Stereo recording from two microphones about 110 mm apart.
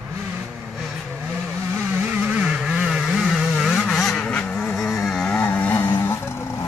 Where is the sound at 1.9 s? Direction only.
15° right (ahead or behind); by 6.6 s 25° left (ahead or behind).